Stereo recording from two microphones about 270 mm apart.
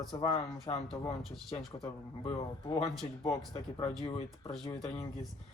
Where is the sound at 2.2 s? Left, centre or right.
Centre.